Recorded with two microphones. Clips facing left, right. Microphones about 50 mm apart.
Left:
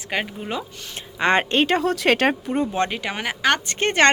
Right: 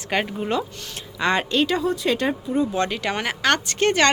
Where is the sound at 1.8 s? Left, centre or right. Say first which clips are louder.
Left 3 dB; left.